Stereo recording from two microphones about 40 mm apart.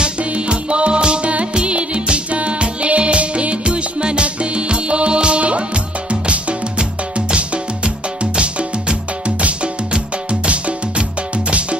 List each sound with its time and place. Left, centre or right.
0.2 s music: right